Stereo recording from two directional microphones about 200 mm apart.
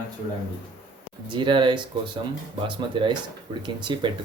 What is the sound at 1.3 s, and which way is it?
Speech, 25° right (ahead or behind).